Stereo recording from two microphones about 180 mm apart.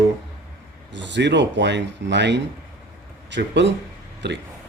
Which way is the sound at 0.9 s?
80° right.